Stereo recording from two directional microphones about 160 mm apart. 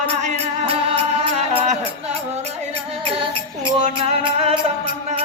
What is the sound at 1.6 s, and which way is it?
Music, 40° right (ahead or behind).